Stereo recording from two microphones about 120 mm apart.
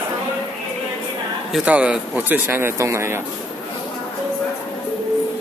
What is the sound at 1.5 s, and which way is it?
Speech, 10° right (ahead or behind).